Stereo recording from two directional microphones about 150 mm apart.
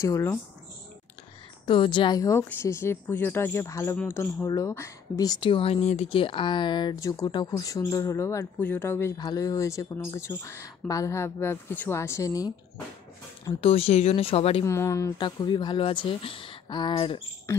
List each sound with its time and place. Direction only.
0.0 s speech: 20° left (ahead or behind)
1.7 s a woman's voice: 35° left (ahead or behind)
13.5 s speech: 40° left (ahead or behind)
14.6 s speech: 20° left (ahead or behind)
15.1 s speech: 30° left (ahead or behind)